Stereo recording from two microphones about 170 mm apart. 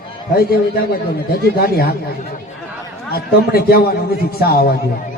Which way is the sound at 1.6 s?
65° left (ahead or behind).